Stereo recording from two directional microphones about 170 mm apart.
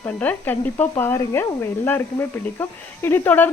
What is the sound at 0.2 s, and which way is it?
Speech, 10° left (ahead or behind).